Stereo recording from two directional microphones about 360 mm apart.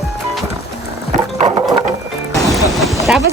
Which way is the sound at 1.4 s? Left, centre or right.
Centre.